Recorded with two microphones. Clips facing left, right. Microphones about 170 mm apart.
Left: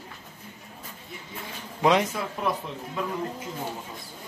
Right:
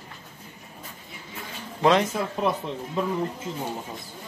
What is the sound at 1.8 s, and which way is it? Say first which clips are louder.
Speech: right 1 dB; 10° left (ahead or behind).